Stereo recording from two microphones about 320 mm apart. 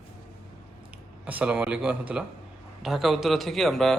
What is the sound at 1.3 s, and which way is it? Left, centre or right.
Speech, centre.